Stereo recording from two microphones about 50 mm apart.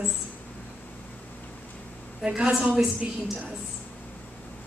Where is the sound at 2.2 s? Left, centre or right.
Right.